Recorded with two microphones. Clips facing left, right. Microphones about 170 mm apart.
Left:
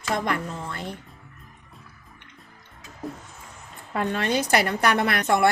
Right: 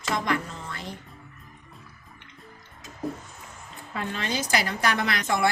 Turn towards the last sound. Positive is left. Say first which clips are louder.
# left 4 dB
turn(degrees=60)  # may be behind; listen again after turning